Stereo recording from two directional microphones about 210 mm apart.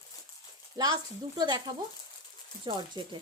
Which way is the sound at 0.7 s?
20° right (ahead or behind).